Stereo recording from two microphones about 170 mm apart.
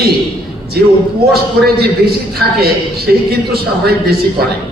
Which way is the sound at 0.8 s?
65° right (ahead or behind).